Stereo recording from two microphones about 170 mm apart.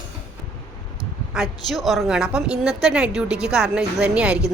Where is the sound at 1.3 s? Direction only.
Centre (ahead or behind).